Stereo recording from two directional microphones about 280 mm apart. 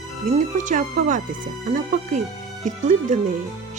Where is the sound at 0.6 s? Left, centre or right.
Right.